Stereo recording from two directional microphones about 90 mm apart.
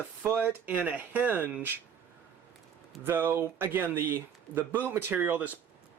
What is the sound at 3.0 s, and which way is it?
Speech, 25° right (ahead or behind).